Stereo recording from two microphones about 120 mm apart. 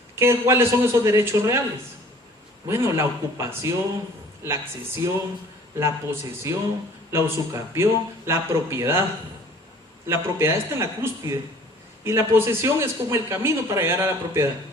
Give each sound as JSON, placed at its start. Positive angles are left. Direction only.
{"t": 0.2, "sound": "a man's voice", "side_deg": -20}
{"t": 2.6, "sound": "a man's voice", "side_deg": -25}
{"t": 5.0, "sound": "a man's voice", "side_deg": -25}
{"t": 10.1, "sound": "a man's voice", "side_deg": -20}